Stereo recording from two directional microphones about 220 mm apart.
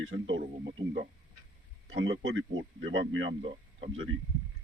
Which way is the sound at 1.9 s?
55° right (ahead or behind).